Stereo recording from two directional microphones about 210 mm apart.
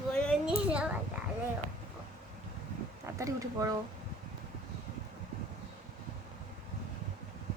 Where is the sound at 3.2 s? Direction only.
15° right (ahead or behind).